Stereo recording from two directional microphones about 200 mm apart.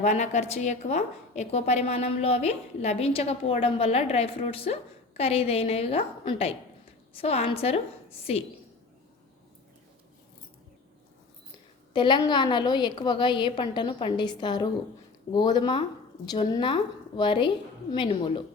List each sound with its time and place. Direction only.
0.0 s a woman's voice: 35° left (ahead or behind)
11.9 s a woman's voice: 25° left (ahead or behind)